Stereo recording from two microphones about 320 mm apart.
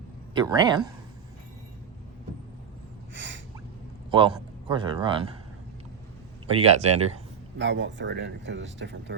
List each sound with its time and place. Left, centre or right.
0.3 s speech: centre
3.2 s a sound: right
4.1 s a man's voice: centre
6.5 s speech: centre
7.6 s speech: right